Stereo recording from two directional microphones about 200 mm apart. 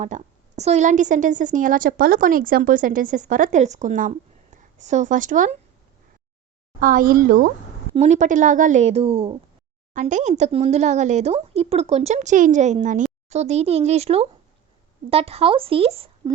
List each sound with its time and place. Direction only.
0.0 s a woman's voice: 35° right (ahead or behind)
6.7 s a woman's voice: 45° right (ahead or behind)
9.9 s a woman's voice: 40° right (ahead or behind)